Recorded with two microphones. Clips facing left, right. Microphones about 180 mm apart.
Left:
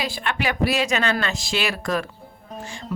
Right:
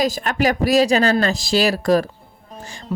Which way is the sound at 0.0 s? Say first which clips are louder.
Right 7 dB; 40° right (ahead or behind).